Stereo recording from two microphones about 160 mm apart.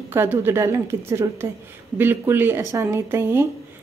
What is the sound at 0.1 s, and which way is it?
Speech, 15° right (ahead or behind).